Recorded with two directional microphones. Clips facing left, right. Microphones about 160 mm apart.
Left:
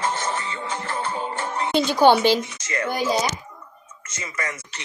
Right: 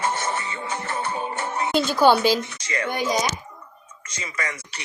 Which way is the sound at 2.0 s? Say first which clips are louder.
Left 2 dB; 15° left (ahead or behind).